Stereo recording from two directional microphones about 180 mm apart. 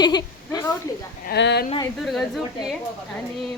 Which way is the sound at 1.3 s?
70° left (ahead or behind).